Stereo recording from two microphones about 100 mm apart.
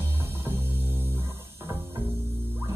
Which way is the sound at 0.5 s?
25° right (ahead or behind).